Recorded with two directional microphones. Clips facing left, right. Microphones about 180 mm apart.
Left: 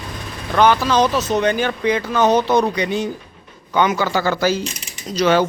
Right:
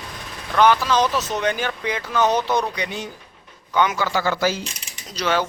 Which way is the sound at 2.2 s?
20° left (ahead or behind).